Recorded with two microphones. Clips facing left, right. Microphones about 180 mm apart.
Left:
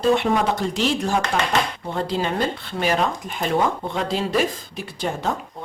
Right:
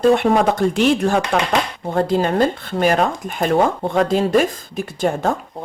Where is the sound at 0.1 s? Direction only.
50° right (ahead or behind).